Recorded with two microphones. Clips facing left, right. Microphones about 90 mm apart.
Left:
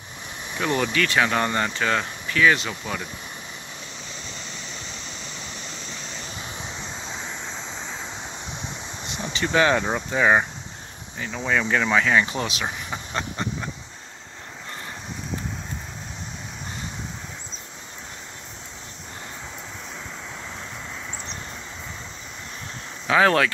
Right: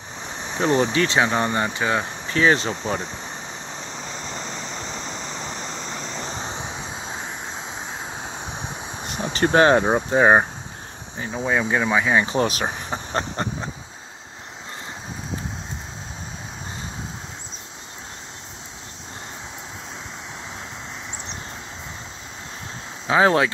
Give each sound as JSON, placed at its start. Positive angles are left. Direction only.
{"t": 0.2, "sound": "speech", "side_deg": -25}
{"t": 2.2, "sound": "speech", "side_deg": -30}
{"t": 3.7, "sound": "vehicle", "side_deg": -35}
{"t": 7.2, "sound": "vehicle", "side_deg": -40}
{"t": 7.5, "sound": "a sound", "side_deg": -10}
{"t": 8.1, "sound": "a sound", "side_deg": -55}
{"t": 8.5, "sound": "waves", "side_deg": -20}
{"t": 9.3, "sound": "speech", "side_deg": -45}
{"t": 11.4, "sound": "speech", "side_deg": -20}
{"t": 12.4, "sound": "speech", "side_deg": -45}
{"t": 12.7, "sound": "vehicle", "side_deg": -40}
{"t": 23.0, "sound": "speech", "side_deg": -25}